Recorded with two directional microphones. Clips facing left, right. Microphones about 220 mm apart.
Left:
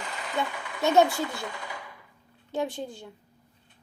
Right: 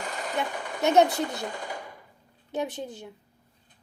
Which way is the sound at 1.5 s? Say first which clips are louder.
Right 3 dB; 45° right (ahead or behind).